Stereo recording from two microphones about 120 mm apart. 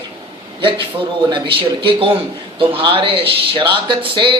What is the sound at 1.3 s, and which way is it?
A man's voice, 40° right (ahead or behind).